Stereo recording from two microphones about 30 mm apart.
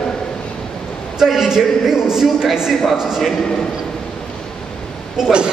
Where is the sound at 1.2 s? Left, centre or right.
Centre.